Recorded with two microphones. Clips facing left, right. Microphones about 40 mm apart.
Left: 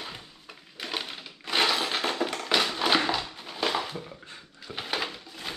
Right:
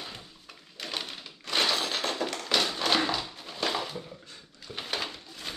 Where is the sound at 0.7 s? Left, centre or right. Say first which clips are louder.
Left 2 dB; centre.